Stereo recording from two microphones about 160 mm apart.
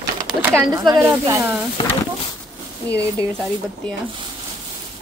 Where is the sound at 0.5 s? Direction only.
25° right (ahead or behind).